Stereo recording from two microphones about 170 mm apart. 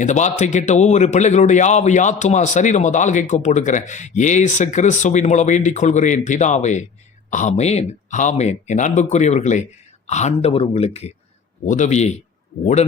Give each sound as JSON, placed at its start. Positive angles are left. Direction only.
{"t": 0.0, "sound": "speech", "side_deg": 45}